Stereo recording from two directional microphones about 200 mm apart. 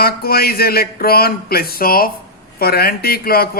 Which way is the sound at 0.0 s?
50° left (ahead or behind).